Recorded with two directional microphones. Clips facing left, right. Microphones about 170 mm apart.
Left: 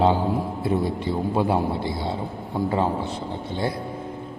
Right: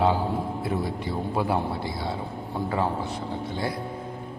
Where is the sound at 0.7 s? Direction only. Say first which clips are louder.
Left 8 dB; 25° left (ahead or behind).